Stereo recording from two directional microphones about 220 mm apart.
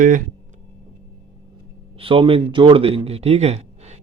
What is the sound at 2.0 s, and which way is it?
Speech, 25° right (ahead or behind).